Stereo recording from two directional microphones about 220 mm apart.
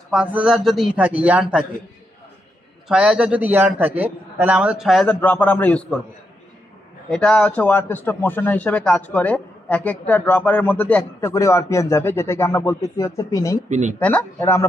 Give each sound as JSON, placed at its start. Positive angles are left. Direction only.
{"t": 0.1, "sound": "a man's voice", "side_deg": -5}
{"t": 2.9, "sound": "a man's voice", "side_deg": -5}
{"t": 7.1, "sound": "speech", "side_deg": 5}
{"t": 13.7, "sound": "speech", "side_deg": -35}
{"t": 13.9, "sound": "speech", "side_deg": 5}